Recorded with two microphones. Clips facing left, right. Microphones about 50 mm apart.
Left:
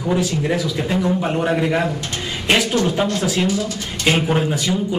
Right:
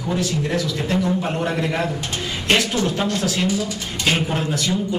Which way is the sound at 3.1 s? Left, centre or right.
Centre.